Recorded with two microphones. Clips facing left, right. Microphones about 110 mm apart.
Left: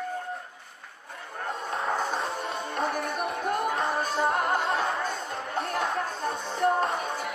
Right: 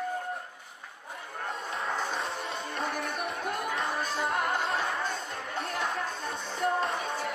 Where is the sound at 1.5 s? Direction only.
30° left (ahead or behind).